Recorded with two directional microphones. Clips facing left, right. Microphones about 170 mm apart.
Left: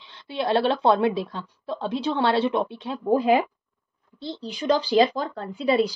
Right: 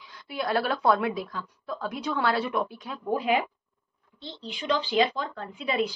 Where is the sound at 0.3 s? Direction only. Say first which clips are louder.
Left 5 dB; 25° left (ahead or behind).